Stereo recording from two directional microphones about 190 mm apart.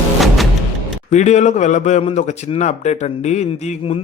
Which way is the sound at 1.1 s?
35° left (ahead or behind).